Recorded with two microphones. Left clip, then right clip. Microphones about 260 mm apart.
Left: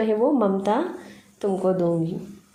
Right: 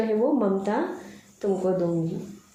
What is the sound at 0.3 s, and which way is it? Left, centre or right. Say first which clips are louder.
A woman's voice: left 3 dB; left.